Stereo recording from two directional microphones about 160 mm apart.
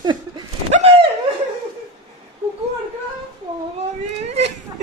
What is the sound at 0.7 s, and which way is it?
Speech, 45° right (ahead or behind).